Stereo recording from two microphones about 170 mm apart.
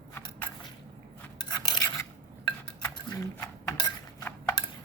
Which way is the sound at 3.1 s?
20° left (ahead or behind).